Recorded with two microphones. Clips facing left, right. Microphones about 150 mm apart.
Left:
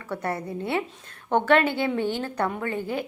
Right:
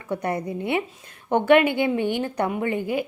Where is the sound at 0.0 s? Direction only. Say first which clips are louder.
Right 3 dB; 15° right (ahead or behind).